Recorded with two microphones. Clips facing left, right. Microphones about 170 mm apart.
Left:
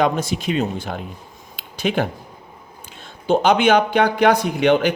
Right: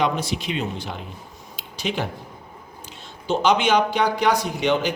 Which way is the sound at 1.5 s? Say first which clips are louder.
Left 6 dB; 55° left (ahead or behind).